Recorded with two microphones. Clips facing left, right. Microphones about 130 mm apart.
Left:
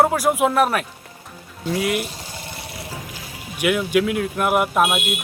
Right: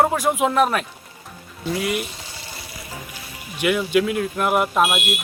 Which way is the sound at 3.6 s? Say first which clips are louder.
Even; 5° left (ahead or behind).